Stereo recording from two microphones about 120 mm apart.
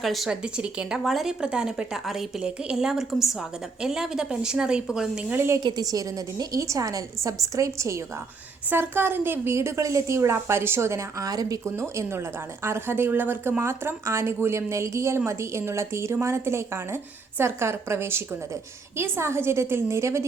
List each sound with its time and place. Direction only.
0.0 s speech: centre (ahead or behind)
5.6 s a woman's voice: 35° right (ahead or behind)